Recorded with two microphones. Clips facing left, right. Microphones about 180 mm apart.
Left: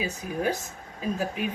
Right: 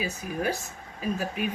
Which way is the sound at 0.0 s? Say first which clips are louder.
Left 1 dB; 20° left (ahead or behind).